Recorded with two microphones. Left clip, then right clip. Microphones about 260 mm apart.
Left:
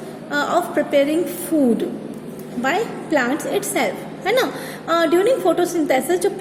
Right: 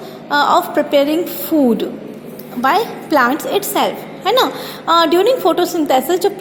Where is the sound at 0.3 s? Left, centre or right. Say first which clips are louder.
Right 7 dB; centre.